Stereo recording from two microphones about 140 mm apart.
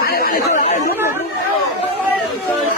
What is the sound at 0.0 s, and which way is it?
Chatter, 90° left.